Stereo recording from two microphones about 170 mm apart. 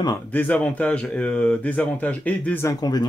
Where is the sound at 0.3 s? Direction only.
10° left (ahead or behind).